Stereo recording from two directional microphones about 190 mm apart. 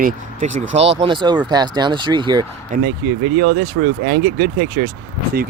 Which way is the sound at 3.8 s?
80° right.